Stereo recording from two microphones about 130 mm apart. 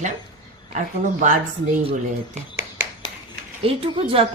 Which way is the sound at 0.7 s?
75° right (ahead or behind).